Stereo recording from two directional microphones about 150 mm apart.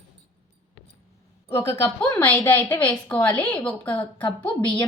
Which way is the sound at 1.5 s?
15° left (ahead or behind).